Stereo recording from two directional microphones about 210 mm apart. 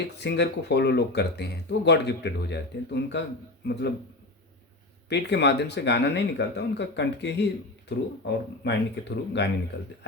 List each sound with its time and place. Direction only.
0.2 s speech: 55° left (ahead or behind)
5.0 s speech: 55° left (ahead or behind)